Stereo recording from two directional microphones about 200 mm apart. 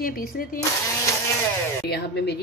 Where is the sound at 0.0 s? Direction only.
45° left (ahead or behind).